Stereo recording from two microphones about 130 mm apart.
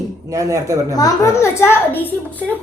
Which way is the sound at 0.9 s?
25° left (ahead or behind).